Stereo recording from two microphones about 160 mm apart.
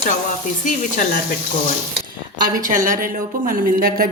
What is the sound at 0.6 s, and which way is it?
Speech, 55° left (ahead or behind).